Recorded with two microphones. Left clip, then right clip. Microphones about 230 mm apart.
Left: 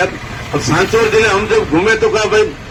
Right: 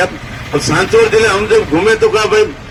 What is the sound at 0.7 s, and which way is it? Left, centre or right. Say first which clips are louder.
A man's voice: right 2 dB; right.